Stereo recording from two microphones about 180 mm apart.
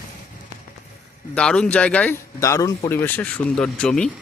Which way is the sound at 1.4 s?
5° left (ahead or behind).